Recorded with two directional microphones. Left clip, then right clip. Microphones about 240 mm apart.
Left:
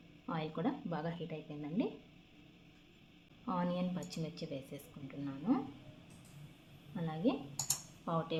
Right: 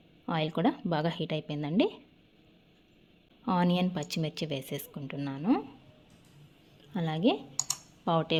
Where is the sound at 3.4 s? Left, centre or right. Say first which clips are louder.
Right 9 dB; right.